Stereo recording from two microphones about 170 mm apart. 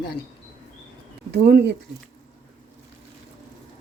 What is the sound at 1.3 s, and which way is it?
Speech, 75° right (ahead or behind).